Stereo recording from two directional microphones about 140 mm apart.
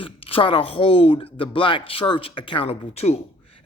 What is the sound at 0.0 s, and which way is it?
Speech, 40° left (ahead or behind).